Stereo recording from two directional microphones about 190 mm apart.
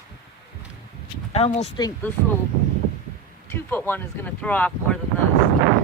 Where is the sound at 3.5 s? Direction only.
10° left (ahead or behind).